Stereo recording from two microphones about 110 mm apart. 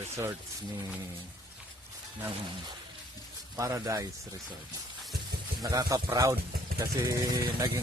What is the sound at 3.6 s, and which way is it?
Speech, 25° right (ahead or behind).